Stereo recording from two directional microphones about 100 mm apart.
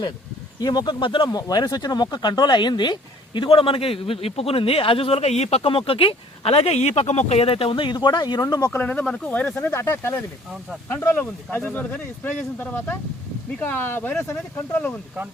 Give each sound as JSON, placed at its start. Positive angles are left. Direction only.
{"t": 0.6, "sound": "speech", "side_deg": 45}
{"t": 1.3, "sound": "speech", "side_deg": 40}
{"t": 8.7, "sound": "speech", "side_deg": 15}
{"t": 9.6, "sound": "speech", "side_deg": 25}